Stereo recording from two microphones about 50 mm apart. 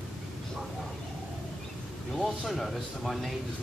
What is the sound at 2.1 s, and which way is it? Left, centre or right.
Speech, centre.